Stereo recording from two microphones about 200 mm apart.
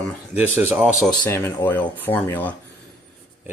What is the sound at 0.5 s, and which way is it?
Speech, 10° right (ahead or behind).